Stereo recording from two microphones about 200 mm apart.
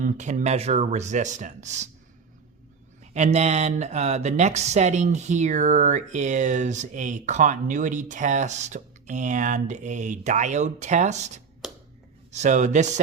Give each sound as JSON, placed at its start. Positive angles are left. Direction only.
{"t": 0.0, "sound": "speech", "side_deg": -40}
{"t": 3.1, "sound": "speech", "side_deg": -35}
{"t": 11.6, "sound": "a sound", "side_deg": 0}
{"t": 12.3, "sound": "speech", "side_deg": -35}